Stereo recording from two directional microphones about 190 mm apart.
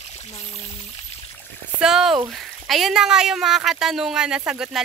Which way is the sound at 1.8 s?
5° right (ahead or behind).